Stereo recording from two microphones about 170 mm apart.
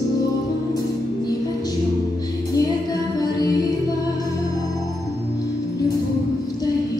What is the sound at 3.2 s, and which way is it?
Music, 20° left (ahead or behind).